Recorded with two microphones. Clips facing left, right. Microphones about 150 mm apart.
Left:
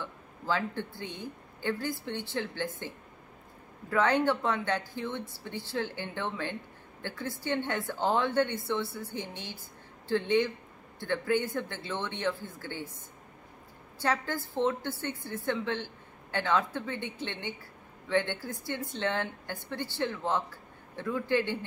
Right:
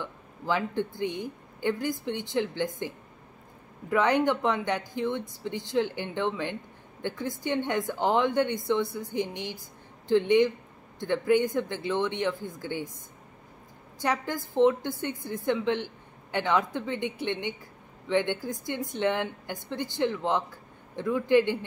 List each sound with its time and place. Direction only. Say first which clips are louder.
0.0 s speech: right 3 dB; 15° right (ahead or behind)
3.9 s a woman's voice: right 2 dB; 15° right (ahead or behind)
13.9 s a woman's voice: right 2 dB; 15° right (ahead or behind)